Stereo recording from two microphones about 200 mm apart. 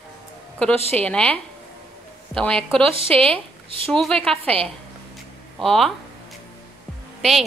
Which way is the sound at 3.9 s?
5° left (ahead or behind).